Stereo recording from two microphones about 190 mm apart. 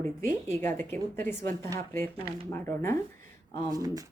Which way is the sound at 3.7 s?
20° right (ahead or behind).